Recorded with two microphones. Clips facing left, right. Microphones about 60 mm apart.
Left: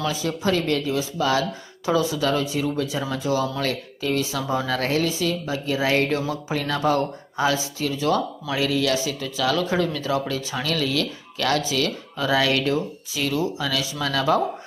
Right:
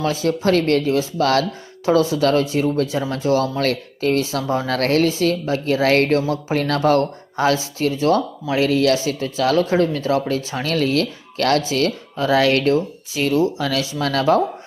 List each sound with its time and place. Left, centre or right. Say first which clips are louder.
0.0 s speech: right 5 dB; right
1.8 s speech: right 6 dB; right
3.1 s speech: right 5 dB; right